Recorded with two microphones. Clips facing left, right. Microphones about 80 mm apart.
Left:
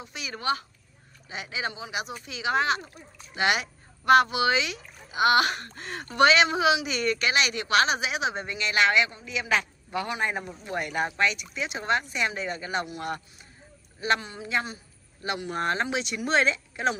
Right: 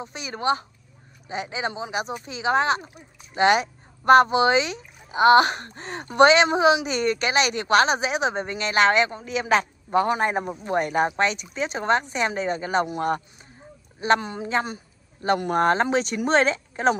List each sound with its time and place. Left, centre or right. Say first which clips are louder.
0.0 s a woman's voice: right 5 dB; right
2.8 s speech: right 1 dB; centre
3.3 s a woman's voice: right 7 dB; right
15.2 s a woman's voice: right 8 dB; right